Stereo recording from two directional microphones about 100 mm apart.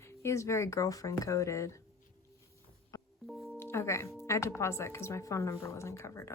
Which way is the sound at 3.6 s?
25° left (ahead or behind).